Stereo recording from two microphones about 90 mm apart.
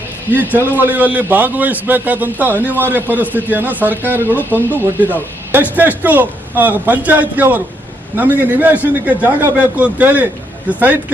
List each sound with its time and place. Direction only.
0.3 s a man's voice: 20° right (ahead or behind)